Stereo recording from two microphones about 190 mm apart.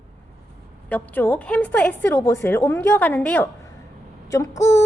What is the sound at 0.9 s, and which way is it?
A woman's voice, 10° left (ahead or behind).